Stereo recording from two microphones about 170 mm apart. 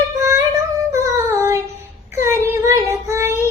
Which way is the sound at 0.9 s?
15° right (ahead or behind).